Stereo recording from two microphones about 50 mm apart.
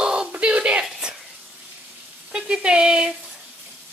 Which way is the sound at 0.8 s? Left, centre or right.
Centre.